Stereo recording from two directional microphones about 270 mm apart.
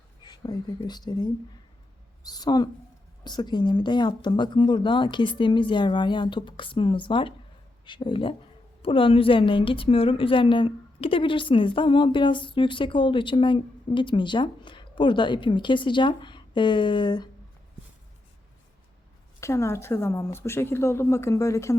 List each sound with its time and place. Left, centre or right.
0.2 s a woman's voice: centre
19.4 s speech: centre